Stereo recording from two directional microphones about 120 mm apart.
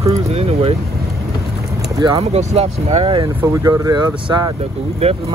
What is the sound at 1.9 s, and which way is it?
Speech, 30° right (ahead or behind).